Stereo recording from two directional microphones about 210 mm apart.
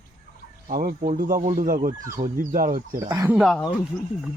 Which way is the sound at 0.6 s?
45° right (ahead or behind).